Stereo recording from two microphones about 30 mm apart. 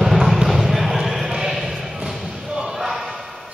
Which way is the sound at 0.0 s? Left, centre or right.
Centre.